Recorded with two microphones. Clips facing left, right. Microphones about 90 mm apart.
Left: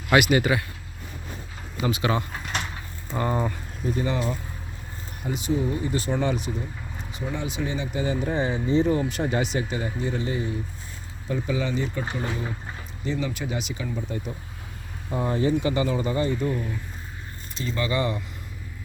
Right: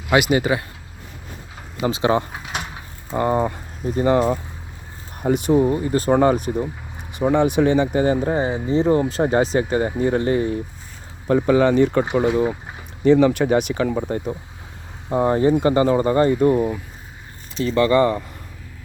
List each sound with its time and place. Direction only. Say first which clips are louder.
0.1 s speech: right 2 dB; 20° right (ahead or behind)
1.8 s speech: right 6 dB; 30° right (ahead or behind)
2.3 s drawer open or close: right 2 dB; 10° right (ahead or behind)
3.1 s speech: right 6 dB; 25° right (ahead or behind)
3.8 s speech: right 9 dB; 45° right (ahead or behind)
5.2 s speech: right 9 dB; 55° right (ahead or behind)
7.1 s speech: right 14 dB; 65° right (ahead or behind)
7.9 s speech: right 8 dB; 50° right (ahead or behind)
8.2 s speech: right 5 dB; 40° right (ahead or behind)
9.6 s speech: right 9 dB; 50° right (ahead or behind)
13.1 s speech: right 14 dB; 65° right (ahead or behind)
15.2 s speech: right 7 dB; 45° right (ahead or behind); by 16.7 s 70° right (ahead or behind)
17.8 s speech: right 9 dB; 50° right (ahead or behind)